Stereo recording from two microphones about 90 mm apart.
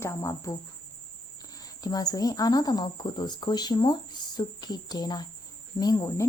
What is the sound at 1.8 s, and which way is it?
Speech, 45° left (ahead or behind).